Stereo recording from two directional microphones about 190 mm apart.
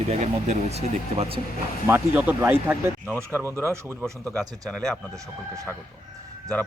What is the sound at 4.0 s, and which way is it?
A man's voice, 5° left (ahead or behind).